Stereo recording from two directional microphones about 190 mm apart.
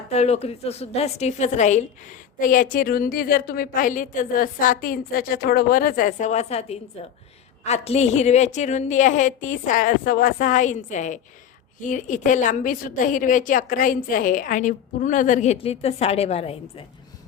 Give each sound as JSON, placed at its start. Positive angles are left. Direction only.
{"t": 0.1, "sound": "a woman's voice", "side_deg": 35}